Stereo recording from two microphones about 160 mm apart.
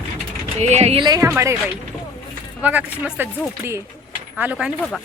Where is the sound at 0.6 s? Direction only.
45° right (ahead or behind).